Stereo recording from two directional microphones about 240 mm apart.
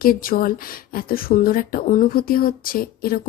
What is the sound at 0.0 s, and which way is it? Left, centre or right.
Speech, left.